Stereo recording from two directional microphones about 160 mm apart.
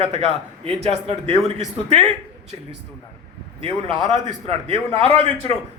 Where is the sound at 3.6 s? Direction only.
30° right (ahead or behind).